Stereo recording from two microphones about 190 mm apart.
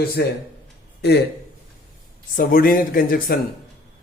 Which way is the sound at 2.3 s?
50° left (ahead or behind).